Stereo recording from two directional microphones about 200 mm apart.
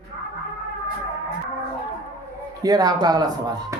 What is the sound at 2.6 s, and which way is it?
Speech, 20° right (ahead or behind).